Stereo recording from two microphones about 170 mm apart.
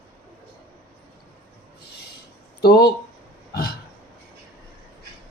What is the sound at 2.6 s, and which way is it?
Speech, 70° left (ahead or behind).